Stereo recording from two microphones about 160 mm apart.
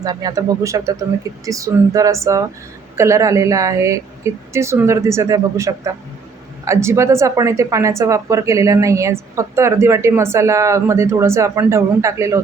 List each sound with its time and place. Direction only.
0.0 s speech: 25° right (ahead or behind)